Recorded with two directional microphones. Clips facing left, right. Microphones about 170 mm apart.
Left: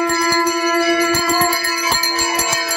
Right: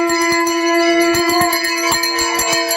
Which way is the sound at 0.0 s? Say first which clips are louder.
Right 2 dB; 20° right (ahead or behind).